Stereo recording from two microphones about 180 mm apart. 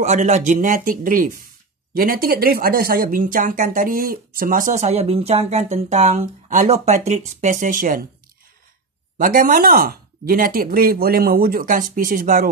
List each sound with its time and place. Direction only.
0.0 s speech: 40° right (ahead or behind)
9.2 s speech: 50° right (ahead or behind)